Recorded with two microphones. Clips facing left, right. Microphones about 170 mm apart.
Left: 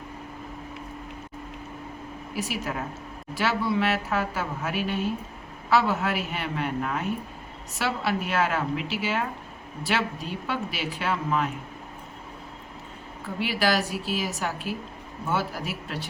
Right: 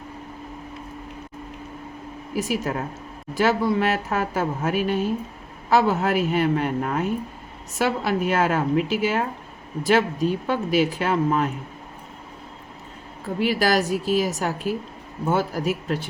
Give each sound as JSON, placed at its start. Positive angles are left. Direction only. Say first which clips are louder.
{"t": 2.3, "sound": "speech", "louder": "right 6 dB", "side_deg": -45}
{"t": 13.4, "sound": "speech", "louder": "right 4 dB", "side_deg": -45}